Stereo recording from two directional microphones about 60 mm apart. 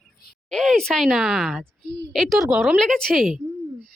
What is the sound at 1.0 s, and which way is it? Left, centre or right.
A woman's voice, centre.